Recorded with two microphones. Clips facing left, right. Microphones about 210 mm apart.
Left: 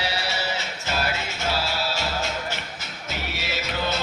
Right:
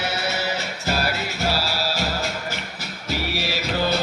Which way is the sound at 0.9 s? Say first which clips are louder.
Right 3 dB; 40° right (ahead or behind).